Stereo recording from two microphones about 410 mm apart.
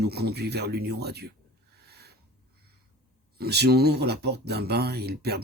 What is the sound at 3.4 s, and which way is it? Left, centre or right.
Speech, right.